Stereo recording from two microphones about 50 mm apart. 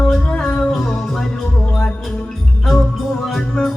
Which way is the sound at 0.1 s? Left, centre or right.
Centre.